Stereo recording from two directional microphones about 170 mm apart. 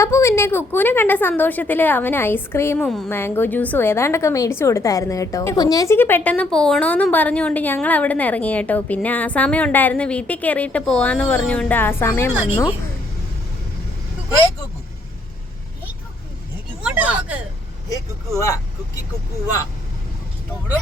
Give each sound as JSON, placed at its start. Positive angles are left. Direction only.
{"t": 0.0, "sound": "a woman's voice", "side_deg": 15}
{"t": 16.8, "sound": "speech", "side_deg": -10}
{"t": 17.8, "sound": "a woman's voice", "side_deg": 20}